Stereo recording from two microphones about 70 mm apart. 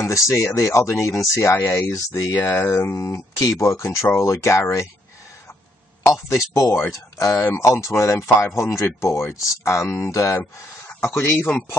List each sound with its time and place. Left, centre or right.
0.0 s speech: left
6.2 s speech: left